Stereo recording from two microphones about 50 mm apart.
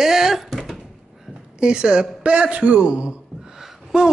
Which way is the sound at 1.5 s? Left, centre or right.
Centre.